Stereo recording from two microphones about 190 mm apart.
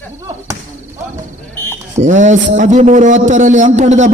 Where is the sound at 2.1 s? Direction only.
40° right (ahead or behind).